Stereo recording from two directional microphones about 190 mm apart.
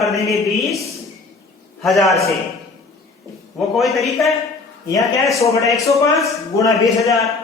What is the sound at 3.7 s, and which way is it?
Speech, centre (ahead or behind).